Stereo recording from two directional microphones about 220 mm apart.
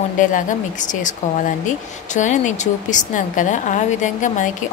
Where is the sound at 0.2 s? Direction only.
35° left (ahead or behind).